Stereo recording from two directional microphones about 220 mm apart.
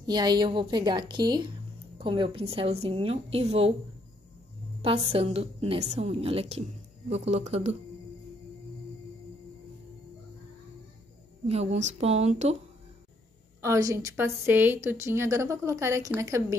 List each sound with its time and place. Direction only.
0.0 s a woman's voice: 20° right (ahead or behind)
4.8 s a woman's voice: 25° right (ahead or behind)
11.4 s a woman's voice: 30° right (ahead or behind)
13.6 s a woman's voice: 15° right (ahead or behind)